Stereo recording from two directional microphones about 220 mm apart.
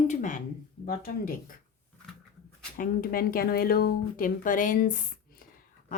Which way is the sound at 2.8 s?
40° left (ahead or behind).